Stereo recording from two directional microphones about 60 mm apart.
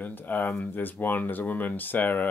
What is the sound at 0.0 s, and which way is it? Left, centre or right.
Speech, left.